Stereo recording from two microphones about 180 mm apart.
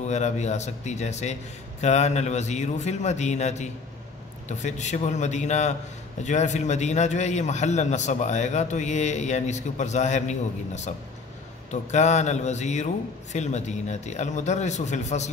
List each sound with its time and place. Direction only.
0.0 s a man's voice: 40° left (ahead or behind)